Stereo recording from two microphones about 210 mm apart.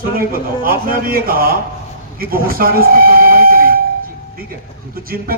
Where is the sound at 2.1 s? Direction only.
45° right (ahead or behind).